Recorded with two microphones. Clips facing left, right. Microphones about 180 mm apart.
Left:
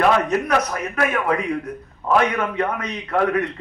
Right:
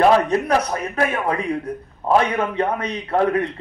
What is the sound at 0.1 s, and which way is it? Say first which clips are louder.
A man's voice: right 2 dB; 30° right (ahead or behind).